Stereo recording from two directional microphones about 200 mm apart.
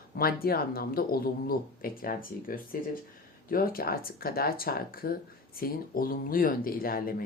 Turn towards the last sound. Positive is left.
turn(degrees=45)  # may be behind; listen again after turning